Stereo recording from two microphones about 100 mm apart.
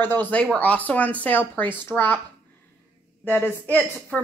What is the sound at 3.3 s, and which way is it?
Speech, 15° left (ahead or behind).